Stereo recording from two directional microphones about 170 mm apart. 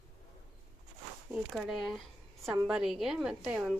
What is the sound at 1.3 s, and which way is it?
A woman's voice, centre (ahead or behind).